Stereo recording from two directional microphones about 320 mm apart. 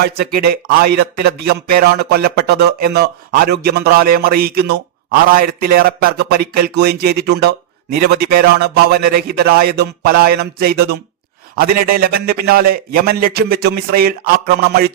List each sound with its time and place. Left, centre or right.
0.0 s a man's voice: right